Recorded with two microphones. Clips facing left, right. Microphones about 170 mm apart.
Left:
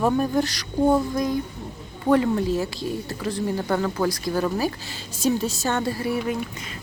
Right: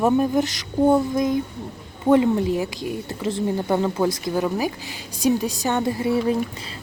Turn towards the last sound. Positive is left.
turn(degrees=-25)  # may be behind; listen again after turning